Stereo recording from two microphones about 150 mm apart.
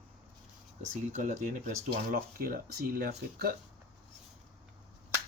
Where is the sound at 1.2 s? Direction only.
60° right (ahead or behind); by 3.5 s 90° right.